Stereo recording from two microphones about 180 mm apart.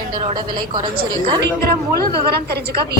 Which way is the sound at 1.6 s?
60° right (ahead or behind).